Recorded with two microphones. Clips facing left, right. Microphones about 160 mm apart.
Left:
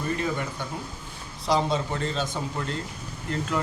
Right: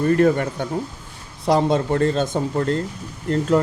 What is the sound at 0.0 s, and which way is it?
Speech, 55° right (ahead or behind).